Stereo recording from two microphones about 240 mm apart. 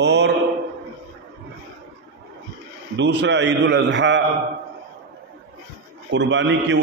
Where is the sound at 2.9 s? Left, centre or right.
Right.